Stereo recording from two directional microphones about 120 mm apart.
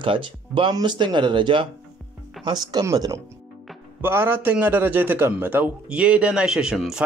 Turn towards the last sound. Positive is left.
turn(degrees=-5)  # may be behind; listen again after turning